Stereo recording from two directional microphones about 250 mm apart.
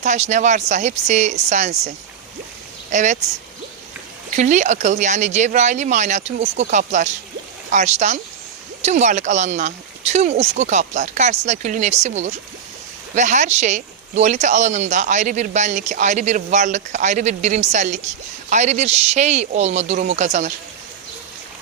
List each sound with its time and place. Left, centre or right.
0.0 s speech: right
2.9 s speech: right
4.4 s speech: right